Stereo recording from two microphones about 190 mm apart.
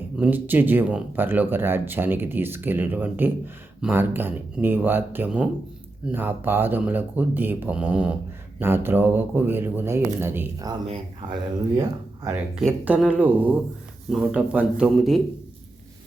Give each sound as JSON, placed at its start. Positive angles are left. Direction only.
{"t": 0.2, "sound": "speech", "side_deg": -10}
{"t": 11.8, "sound": "a man's voice", "side_deg": -15}